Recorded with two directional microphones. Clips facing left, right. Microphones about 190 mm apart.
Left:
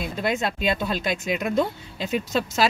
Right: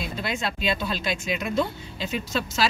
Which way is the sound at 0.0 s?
55° left (ahead or behind).